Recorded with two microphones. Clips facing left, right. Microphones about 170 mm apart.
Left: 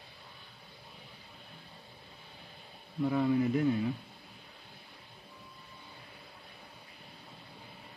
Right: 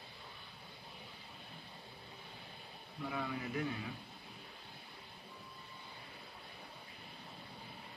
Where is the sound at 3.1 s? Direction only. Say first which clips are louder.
Left 13 dB; 40° left (ahead or behind).